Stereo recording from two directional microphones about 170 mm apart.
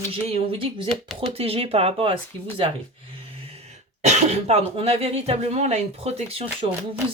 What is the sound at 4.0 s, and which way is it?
Speech, 40° right (ahead or behind).